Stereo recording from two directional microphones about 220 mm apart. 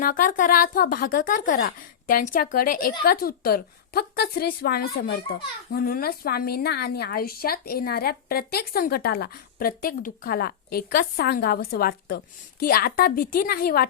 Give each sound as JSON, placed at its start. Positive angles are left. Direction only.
{"t": 0.0, "sound": "a woman's voice", "side_deg": 40}